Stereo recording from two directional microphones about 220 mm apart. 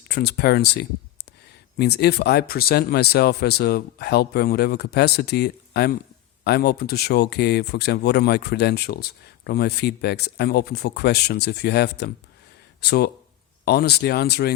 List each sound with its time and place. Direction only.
0.1 s speech: 45° left (ahead or behind)